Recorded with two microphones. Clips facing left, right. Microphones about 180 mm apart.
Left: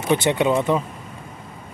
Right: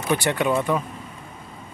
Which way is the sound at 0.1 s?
20° left (ahead or behind).